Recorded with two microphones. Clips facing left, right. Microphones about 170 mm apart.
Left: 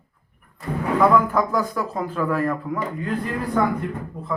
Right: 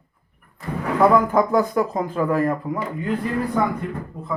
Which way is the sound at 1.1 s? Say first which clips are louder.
Right 2 dB; 20° right (ahead or behind).